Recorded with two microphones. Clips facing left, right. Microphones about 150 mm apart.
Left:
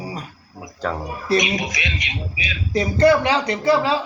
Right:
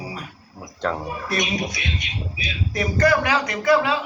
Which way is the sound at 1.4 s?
90° left.